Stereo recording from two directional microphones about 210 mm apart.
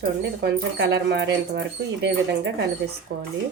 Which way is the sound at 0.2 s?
50° right (ahead or behind).